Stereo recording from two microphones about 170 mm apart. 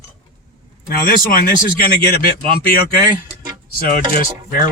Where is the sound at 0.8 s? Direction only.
60° left (ahead or behind).